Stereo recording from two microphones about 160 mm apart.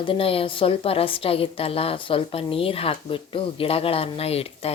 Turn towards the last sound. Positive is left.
turn(degrees=40)  # may be behind; listen again after turning